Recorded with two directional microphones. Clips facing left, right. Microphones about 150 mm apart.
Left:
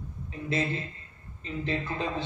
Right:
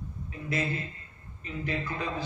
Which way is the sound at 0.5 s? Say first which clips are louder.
Left 2 dB; 25° left (ahead or behind).